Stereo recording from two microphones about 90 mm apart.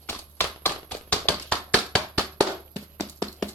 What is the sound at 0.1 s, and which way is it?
Tap, 25° left (ahead or behind).